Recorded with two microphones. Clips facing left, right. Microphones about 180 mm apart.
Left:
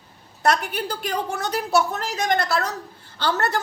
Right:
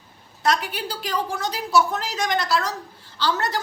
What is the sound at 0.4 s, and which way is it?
A woman's voice, 55° left (ahead or behind).